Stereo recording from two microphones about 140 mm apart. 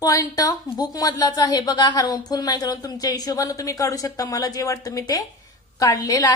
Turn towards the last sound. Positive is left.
turn(degrees=25)  # may be behind; listen again after turning